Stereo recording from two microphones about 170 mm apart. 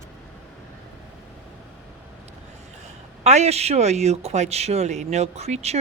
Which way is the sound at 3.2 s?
40° right (ahead or behind).